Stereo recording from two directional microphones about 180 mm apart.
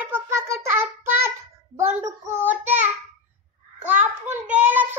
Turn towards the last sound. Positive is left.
turn(degrees=-10)  # may be behind; listen again after turning